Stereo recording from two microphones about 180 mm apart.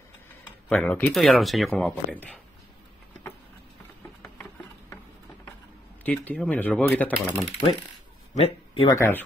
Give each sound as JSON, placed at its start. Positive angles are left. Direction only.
{"t": 0.7, "sound": "speech", "side_deg": 5}
{"t": 6.0, "sound": "speech", "side_deg": 10}
{"t": 8.4, "sound": "speech", "side_deg": 30}
{"t": 8.9, "sound": "speech", "side_deg": 15}